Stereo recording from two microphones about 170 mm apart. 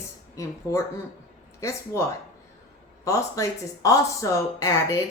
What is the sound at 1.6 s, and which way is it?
Speech, 15° left (ahead or behind).